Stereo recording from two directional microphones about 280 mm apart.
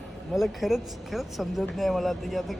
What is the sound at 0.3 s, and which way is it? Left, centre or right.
Speech, centre.